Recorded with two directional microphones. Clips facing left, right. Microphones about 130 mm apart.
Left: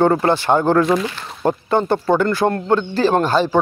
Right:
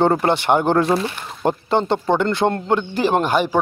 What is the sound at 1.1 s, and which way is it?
Speech, 20° right (ahead or behind).